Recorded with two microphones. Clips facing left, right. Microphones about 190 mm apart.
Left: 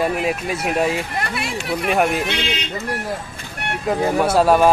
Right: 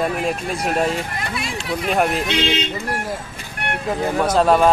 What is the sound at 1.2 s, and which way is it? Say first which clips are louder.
Speech: left 2 dB; 65° left (ahead or behind).